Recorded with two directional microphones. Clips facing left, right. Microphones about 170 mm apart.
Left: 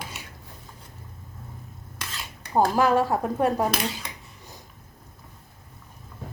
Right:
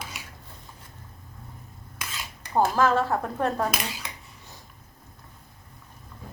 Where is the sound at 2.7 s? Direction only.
15° left (ahead or behind).